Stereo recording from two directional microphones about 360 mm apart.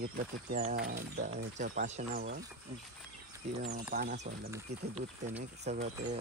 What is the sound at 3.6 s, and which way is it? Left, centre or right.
Speech, right.